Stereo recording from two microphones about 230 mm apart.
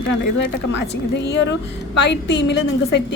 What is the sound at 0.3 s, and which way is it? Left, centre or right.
A woman's voice, left.